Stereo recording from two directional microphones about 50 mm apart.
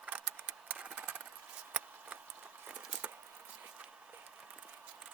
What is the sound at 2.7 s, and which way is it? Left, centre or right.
Patter, right.